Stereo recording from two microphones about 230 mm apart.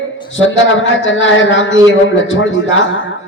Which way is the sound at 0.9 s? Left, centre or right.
Left.